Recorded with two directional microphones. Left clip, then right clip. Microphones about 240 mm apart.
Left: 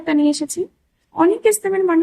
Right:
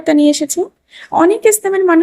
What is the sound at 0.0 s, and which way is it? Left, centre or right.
Speech, right.